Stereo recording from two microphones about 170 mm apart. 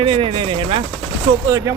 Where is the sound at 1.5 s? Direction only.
20° right (ahead or behind).